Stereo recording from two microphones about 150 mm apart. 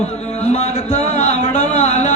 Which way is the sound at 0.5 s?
45° left (ahead or behind).